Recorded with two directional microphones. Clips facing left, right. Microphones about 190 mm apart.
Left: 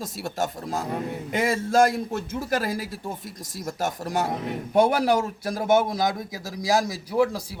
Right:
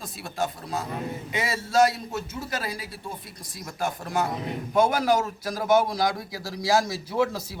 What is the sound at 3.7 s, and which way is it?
Speech, 40° left (ahead or behind).